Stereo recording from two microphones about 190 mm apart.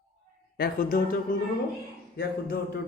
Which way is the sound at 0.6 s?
50° left (ahead or behind).